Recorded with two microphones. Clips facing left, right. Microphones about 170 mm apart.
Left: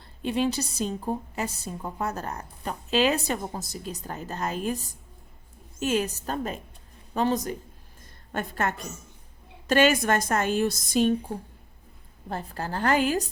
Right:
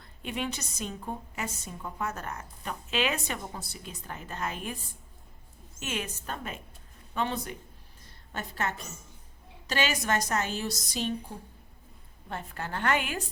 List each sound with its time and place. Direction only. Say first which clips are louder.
0.0 s a woman's voice: left 8 dB; 30° left (ahead or behind)
5.8 s a woman's voice: left 10 dB; 35° left (ahead or behind)
8.0 s a sound: left 7 dB; 50° left (ahead or behind)
9.6 s a woman's voice: left 8 dB; 50° left (ahead or behind)
12.3 s a woman's voice: left 4 dB; 35° left (ahead or behind)